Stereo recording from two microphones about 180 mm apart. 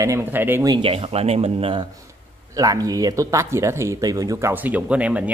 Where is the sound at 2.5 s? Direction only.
20° right (ahead or behind).